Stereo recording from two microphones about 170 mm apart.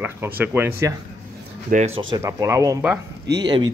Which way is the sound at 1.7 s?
40° right (ahead or behind).